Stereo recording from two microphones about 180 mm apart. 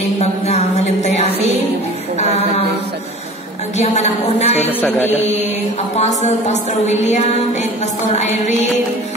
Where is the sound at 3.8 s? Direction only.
40° left (ahead or behind).